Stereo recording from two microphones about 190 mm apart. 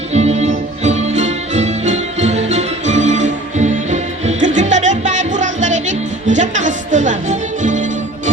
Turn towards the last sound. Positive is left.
turn(degrees=-40)  # may be behind; listen again after turning